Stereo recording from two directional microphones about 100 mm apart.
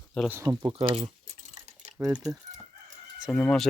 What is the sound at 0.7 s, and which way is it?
Speech, 70° right (ahead or behind).